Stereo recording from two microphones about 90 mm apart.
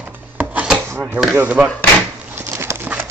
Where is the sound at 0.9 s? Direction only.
25° right (ahead or behind).